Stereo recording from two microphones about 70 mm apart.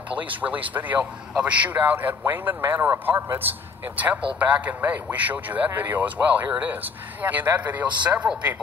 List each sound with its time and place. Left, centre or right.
0.1 s speech: right